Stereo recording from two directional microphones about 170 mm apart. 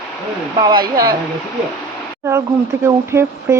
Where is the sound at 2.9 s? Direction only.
20° right (ahead or behind).